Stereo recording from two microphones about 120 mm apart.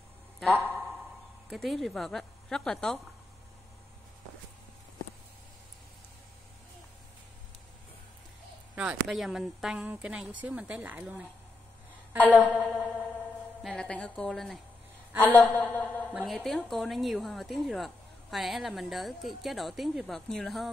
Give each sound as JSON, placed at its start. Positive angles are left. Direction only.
{"t": 0.5, "sound": "speech", "side_deg": -15}
{"t": 1.5, "sound": "a woman's voice", "side_deg": 0}
{"t": 8.7, "sound": "a woman's voice", "side_deg": -5}
{"t": 12.2, "sound": "a woman's voice", "side_deg": 15}
{"t": 15.1, "sound": "a woman's voice", "side_deg": 15}
{"t": 16.3, "sound": "a woman's voice", "side_deg": 5}